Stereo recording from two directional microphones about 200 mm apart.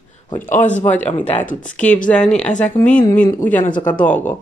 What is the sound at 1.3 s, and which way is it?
Speech, 35° left (ahead or behind).